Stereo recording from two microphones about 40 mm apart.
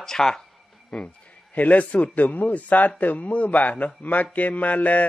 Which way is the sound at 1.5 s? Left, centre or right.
Left.